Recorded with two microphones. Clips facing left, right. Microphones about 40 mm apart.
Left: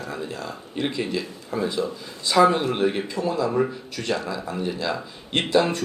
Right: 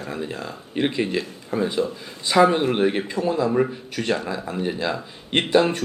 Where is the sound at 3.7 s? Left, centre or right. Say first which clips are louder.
Right 2 dB; right.